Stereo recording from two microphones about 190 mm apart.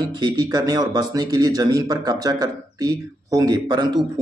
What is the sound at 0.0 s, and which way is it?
Speech, 25° right (ahead or behind).